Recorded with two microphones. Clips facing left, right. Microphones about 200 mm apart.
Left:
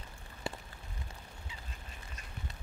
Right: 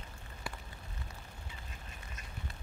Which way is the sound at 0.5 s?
25° left (ahead or behind).